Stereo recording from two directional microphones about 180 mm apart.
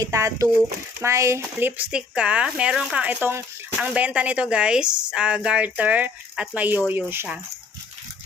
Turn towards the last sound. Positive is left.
turn(degrees=-10)  # may be behind; listen again after turning